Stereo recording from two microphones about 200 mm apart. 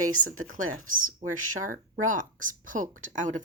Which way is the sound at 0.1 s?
90° right.